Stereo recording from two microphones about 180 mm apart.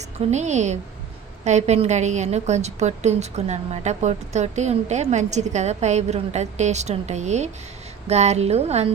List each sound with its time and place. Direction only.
0.2 s a woman's voice: 40° right (ahead or behind)